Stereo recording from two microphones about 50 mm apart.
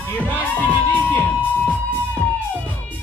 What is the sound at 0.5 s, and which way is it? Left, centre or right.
Music, left.